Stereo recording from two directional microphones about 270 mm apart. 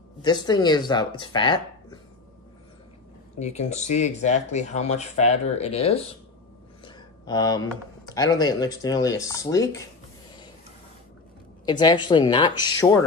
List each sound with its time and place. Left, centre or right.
0.2 s speech: centre
3.3 s speech: left
6.8 s a sound: centre
8.0 s speech: centre
11.6 s speech: centre